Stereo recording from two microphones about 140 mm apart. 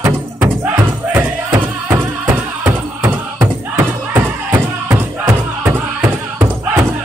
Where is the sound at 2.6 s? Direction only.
25° right (ahead or behind).